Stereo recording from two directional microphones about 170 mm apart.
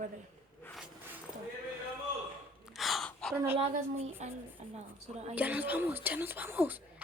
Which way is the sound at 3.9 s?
40° right (ahead or behind).